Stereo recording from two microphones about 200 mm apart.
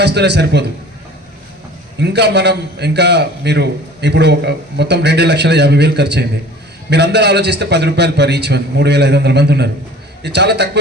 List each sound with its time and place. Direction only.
0.0 s a man's voice: 60° right (ahead or behind)
2.0 s a man's voice: 60° right (ahead or behind)